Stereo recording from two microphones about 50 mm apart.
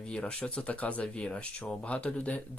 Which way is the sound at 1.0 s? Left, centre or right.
Centre.